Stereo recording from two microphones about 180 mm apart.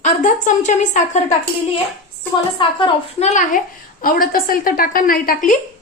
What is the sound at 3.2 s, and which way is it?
A woman's voice, 45° left (ahead or behind).